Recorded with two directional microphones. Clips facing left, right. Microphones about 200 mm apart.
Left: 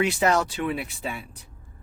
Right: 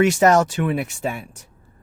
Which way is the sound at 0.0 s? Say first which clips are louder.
Right 7 dB; 45° right (ahead or behind).